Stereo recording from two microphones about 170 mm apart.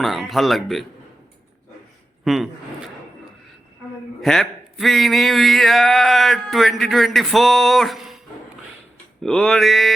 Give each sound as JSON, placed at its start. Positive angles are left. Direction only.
{"t": 0.0, "sound": "a man's voice", "side_deg": 0}
{"t": 2.2, "sound": "speech", "side_deg": 0}
{"t": 4.2, "sound": "a man's voice", "side_deg": 0}
{"t": 9.2, "sound": "a man's voice", "side_deg": 5}